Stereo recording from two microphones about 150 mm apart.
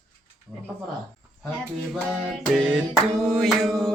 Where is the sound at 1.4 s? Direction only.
10° left (ahead or behind).